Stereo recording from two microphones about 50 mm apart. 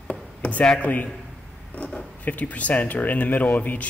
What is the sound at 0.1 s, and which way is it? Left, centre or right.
Speech, left.